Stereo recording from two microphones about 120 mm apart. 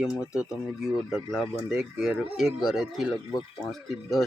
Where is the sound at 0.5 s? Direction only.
5° right (ahead or behind).